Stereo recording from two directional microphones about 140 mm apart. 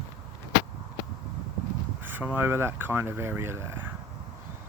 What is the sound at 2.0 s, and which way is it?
Speech, 15° right (ahead or behind).